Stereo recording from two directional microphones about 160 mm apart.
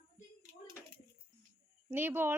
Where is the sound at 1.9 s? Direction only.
15° right (ahead or behind).